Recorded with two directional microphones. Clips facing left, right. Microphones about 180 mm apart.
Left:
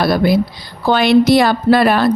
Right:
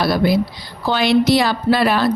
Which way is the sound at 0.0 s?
50° left (ahead or behind).